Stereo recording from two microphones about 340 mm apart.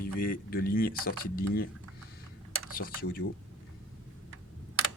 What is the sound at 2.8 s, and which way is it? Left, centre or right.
Speech, left.